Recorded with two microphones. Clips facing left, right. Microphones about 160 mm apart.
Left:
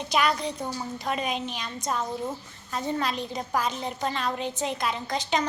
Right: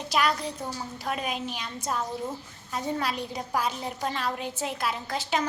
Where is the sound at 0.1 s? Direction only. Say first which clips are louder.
Left 1 dB; centre (ahead or behind).